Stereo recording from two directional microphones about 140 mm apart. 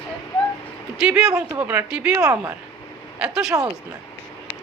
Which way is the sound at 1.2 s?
25° right (ahead or behind).